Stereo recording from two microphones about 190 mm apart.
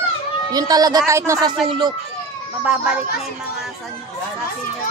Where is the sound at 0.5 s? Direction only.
20° right (ahead or behind).